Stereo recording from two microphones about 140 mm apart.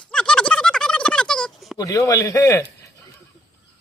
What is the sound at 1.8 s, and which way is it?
A man's voice, 25° left (ahead or behind).